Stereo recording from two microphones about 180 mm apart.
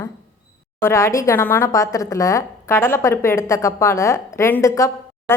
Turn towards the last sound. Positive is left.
turn(degrees=15)  # may be behind; listen again after turning